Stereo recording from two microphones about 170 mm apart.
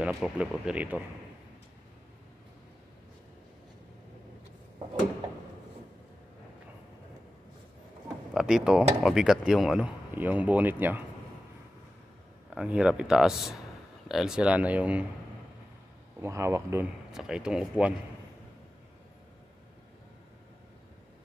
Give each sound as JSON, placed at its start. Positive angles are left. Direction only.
{"t": 0.1, "sound": "speech", "side_deg": -5}
{"t": 8.3, "sound": "speech", "side_deg": -5}
{"t": 12.4, "sound": "speech", "side_deg": -5}
{"t": 16.2, "sound": "speech", "side_deg": -15}
{"t": 17.1, "sound": "speech", "side_deg": -5}